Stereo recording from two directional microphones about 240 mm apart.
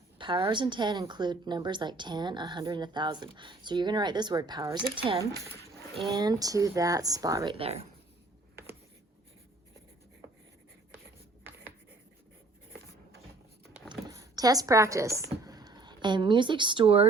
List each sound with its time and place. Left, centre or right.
0.2 s a woman's voice: centre
13.9 s speech: centre